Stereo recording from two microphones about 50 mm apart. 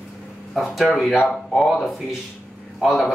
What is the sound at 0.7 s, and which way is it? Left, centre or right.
Speech, centre.